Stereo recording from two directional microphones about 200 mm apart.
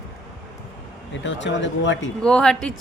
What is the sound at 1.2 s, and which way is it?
Speech, 65° left (ahead or behind).